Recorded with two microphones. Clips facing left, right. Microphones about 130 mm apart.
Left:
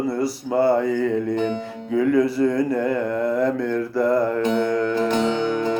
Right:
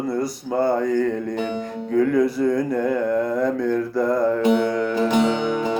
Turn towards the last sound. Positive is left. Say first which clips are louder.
# even
turn(degrees=-15)  # may be behind; listen again after turning